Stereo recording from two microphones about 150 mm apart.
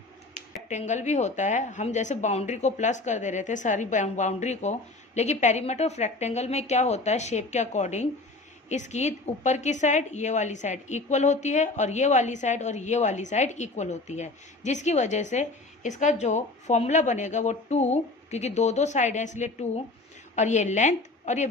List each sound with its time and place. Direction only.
0.7 s a woman's voice: 50° left (ahead or behind)